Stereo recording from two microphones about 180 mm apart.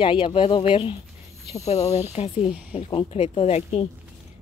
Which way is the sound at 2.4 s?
5° right (ahead or behind).